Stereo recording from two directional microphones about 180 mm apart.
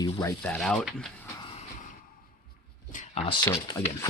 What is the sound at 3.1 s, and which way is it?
Speech, 30° left (ahead or behind).